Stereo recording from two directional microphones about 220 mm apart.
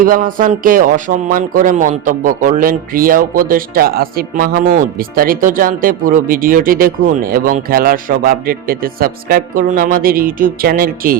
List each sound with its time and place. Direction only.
0.0 s speech: 40° right (ahead or behind)